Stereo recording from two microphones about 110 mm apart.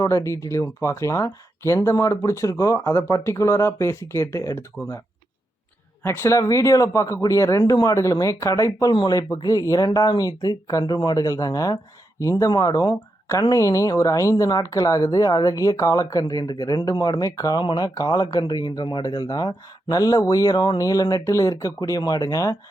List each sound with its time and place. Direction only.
0.0 s speech: 30° left (ahead or behind)
6.0 s speech: 20° left (ahead or behind)
17.6 s speech: 45° left (ahead or behind)
17.8 s speech: 35° left (ahead or behind)